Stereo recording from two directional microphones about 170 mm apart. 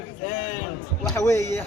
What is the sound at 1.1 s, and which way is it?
Speech, 20° left (ahead or behind).